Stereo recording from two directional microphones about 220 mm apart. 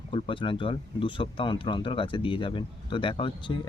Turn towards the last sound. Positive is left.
turn(degrees=20)  # may be behind; listen again after turning